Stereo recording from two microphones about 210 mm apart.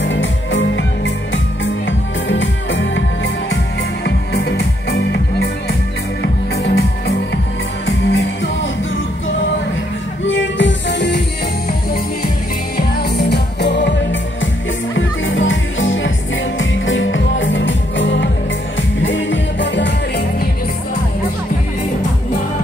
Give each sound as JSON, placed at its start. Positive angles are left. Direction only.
{"t": 0.0, "sound": "music", "side_deg": 60}
{"t": 4.0, "sound": "music", "side_deg": 50}
{"t": 7.8, "sound": "music", "side_deg": 60}
{"t": 10.2, "sound": "music", "side_deg": 60}
{"t": 12.7, "sound": "music", "side_deg": 50}
{"t": 15.0, "sound": "music", "side_deg": 65}